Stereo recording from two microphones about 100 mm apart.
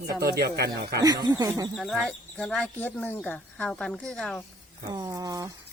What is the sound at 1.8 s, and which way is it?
Speech, centre (ahead or behind).